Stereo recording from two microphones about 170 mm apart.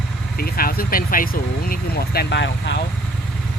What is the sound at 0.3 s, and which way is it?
Speech, 60° left (ahead or behind).